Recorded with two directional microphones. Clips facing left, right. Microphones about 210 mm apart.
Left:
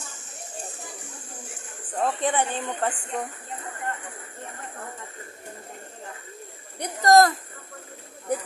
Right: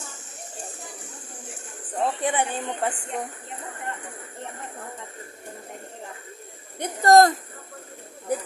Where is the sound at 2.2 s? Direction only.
15° right (ahead or behind).